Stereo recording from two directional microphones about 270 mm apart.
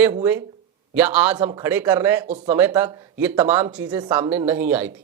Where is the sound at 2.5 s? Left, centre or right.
Centre.